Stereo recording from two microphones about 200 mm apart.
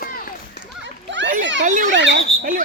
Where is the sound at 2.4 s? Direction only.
40° right (ahead or behind).